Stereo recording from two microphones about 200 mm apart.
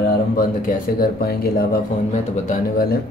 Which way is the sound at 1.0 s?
50° left (ahead or behind).